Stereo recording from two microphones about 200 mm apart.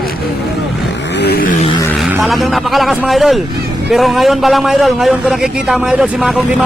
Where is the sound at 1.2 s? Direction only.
50° left (ahead or behind).